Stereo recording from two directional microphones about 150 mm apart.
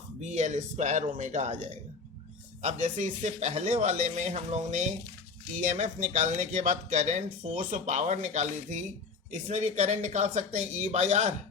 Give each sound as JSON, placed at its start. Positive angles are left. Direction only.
{"t": 0.2, "sound": "speech", "side_deg": -50}